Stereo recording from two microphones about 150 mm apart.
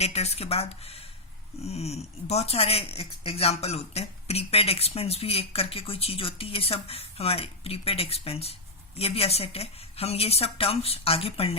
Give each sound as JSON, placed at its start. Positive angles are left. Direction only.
{"t": 0.0, "sound": "speech", "side_deg": 45}